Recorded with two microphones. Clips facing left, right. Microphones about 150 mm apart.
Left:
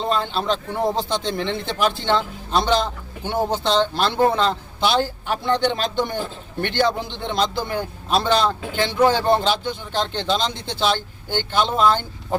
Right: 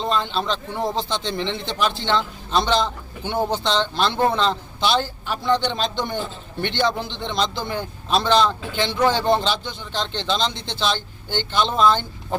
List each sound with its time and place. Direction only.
0.0 s a man's voice: 10° left (ahead or behind)
1.4 s speech: 20° right (ahead or behind)
2.0 s a man's voice: 10° left (ahead or behind)